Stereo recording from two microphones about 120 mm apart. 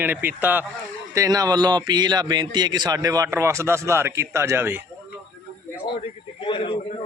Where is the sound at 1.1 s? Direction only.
30° right (ahead or behind).